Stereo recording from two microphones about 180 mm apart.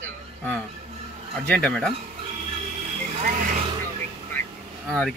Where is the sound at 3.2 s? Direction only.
45° right (ahead or behind).